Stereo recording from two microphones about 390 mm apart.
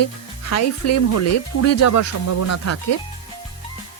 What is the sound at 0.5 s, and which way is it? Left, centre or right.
Speech, left.